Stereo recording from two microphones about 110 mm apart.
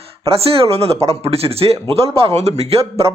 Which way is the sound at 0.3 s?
60° right (ahead or behind).